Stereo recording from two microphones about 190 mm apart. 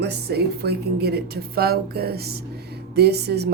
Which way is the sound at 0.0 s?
60° right (ahead or behind).